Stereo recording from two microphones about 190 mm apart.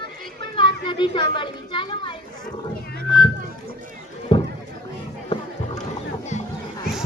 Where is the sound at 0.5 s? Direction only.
25° left (ahead or behind).